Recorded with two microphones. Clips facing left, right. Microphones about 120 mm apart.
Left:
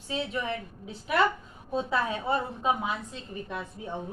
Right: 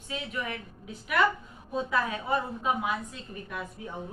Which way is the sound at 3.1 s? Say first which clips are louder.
Left 2 dB; 25° left (ahead or behind).